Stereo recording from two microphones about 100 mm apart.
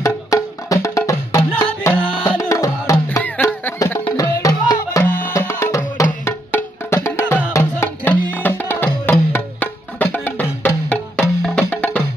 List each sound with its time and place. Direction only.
0.0 s music: 35° left (ahead or behind)
2.0 s music: 65° left (ahead or behind)
2.3 s music: 30° left (ahead or behind)
4.2 s music: 35° left (ahead or behind)
5.0 s music: 20° left (ahead or behind)